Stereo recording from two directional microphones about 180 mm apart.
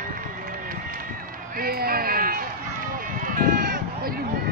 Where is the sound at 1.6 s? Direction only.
55° right (ahead or behind).